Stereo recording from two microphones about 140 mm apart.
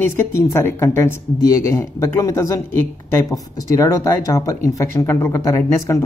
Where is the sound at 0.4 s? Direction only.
20° left (ahead or behind).